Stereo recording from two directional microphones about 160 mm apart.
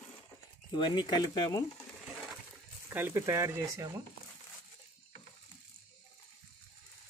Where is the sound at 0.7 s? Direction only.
25° left (ahead or behind).